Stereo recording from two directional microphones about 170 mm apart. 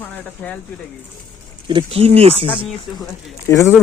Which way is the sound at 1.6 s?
30° right (ahead or behind).